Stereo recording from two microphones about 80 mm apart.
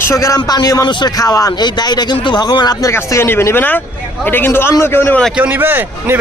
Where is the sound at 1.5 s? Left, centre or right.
Left.